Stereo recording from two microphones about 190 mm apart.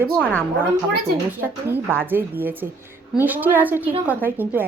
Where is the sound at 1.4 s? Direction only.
10° right (ahead or behind).